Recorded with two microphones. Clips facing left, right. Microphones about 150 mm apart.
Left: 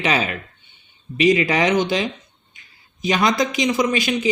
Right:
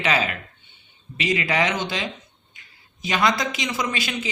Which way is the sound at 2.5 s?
20° left (ahead or behind).